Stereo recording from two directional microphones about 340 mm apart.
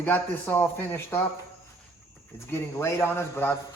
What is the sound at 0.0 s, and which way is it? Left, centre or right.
A man's voice, centre.